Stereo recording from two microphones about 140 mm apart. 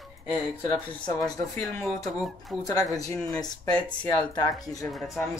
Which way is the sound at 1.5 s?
20° left (ahead or behind).